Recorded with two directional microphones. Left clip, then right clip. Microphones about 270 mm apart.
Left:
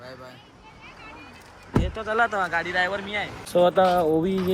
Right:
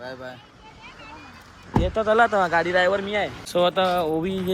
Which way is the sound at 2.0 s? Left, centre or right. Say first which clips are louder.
Right 5 dB; centre.